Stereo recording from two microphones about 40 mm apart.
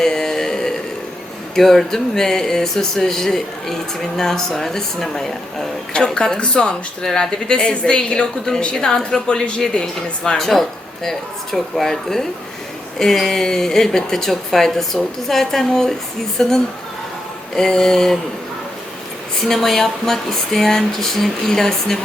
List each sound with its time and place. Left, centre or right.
0.0 s a sound: centre
1.5 s a woman's voice: centre
19.5 s a woman's voice: centre